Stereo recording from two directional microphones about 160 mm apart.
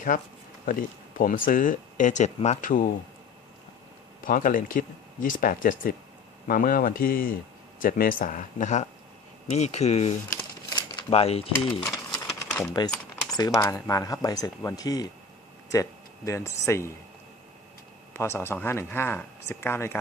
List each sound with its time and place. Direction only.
0.6 s speech: 60° left (ahead or behind)
4.2 s speech: 60° left (ahead or behind); by 11.9 s 35° left (ahead or behind)
12.1 s typewriter: 15° left (ahead or behind)
13.6 s speech: 20° left (ahead or behind)
18.1 s speech: 15° left (ahead or behind)